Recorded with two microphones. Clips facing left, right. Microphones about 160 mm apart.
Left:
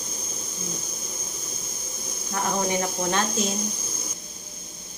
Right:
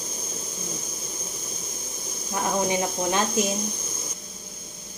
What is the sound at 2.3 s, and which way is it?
Speech, 15° right (ahead or behind).